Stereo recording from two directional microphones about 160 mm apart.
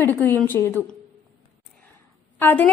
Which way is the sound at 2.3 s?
10° left (ahead or behind).